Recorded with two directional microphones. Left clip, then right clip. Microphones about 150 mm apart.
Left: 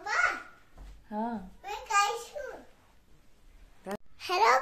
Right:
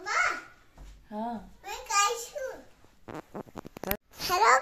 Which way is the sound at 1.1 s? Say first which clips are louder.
Left 1 dB; 5° left (ahead or behind).